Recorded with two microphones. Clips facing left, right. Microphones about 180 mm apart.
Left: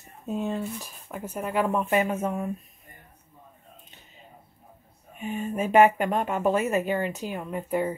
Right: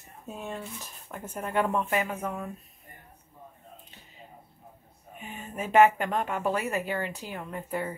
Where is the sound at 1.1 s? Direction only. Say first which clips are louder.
Left 2 dB; 10° left (ahead or behind).